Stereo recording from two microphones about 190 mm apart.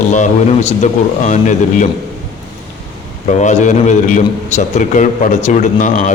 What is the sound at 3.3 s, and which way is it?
A man's voice, 40° left (ahead or behind).